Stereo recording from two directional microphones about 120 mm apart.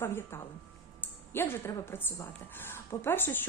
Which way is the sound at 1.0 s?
20° left (ahead or behind).